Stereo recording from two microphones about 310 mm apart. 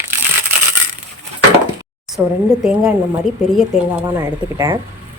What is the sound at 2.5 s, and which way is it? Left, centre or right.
Speech, centre.